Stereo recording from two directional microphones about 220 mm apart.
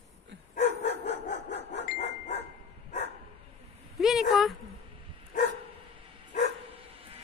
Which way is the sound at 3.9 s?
Centre (ahead or behind).